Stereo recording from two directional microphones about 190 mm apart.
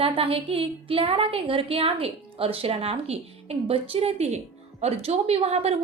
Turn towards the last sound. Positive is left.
turn(degrees=-30)  # may be behind; listen again after turning